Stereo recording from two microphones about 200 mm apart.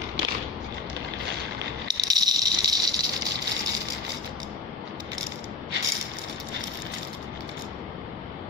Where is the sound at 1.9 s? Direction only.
20° right (ahead or behind).